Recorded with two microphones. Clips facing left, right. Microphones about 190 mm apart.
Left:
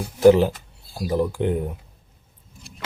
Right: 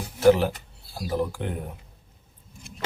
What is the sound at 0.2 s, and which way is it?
Speech, 15° left (ahead or behind).